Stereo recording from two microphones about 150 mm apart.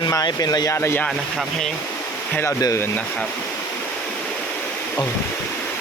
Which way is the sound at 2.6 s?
25° left (ahead or behind).